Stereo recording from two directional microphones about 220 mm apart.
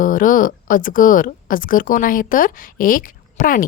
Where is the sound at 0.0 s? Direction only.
40° left (ahead or behind).